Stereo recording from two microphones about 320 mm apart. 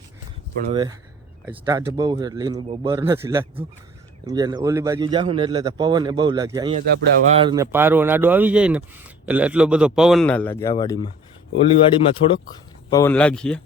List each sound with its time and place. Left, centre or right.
0.7 s a man's voice: centre